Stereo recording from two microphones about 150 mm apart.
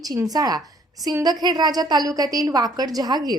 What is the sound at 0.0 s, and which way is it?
A woman's voice, 25° right (ahead or behind).